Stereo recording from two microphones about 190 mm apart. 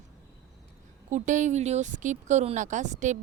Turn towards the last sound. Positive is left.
turn(degrees=-40)  # may be behind; listen again after turning